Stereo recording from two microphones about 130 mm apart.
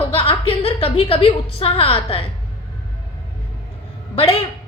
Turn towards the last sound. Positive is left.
turn(degrees=45)  # may be behind; listen again after turning